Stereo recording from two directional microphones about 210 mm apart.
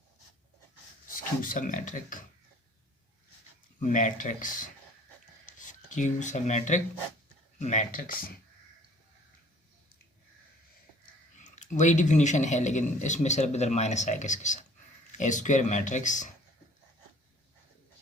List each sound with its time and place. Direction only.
1.0 s speech: 40° left (ahead or behind)
3.8 s a man's voice: 40° left (ahead or behind)
11.3 s a man's voice: 35° left (ahead or behind)